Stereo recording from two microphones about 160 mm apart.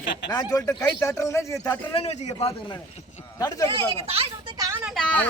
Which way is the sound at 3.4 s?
20° left (ahead or behind).